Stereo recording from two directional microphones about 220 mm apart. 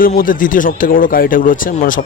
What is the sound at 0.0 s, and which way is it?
A man's voice, 40° left (ahead or behind).